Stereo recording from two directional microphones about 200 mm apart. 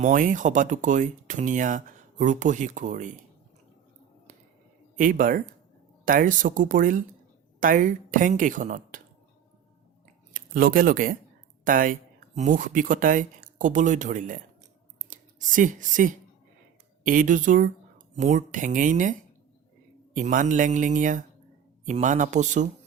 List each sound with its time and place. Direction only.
0.0 s speech: 40° right (ahead or behind)
4.9 s speech: 40° right (ahead or behind)
10.3 s speech: 45° right (ahead or behind)
20.1 s speech: 40° right (ahead or behind)